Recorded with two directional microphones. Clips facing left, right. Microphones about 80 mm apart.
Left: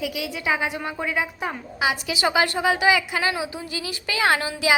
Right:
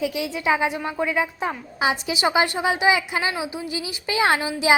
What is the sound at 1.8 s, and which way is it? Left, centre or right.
A woman's voice, right.